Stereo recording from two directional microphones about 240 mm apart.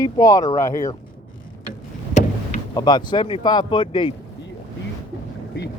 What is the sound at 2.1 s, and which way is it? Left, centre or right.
Vehicle, left.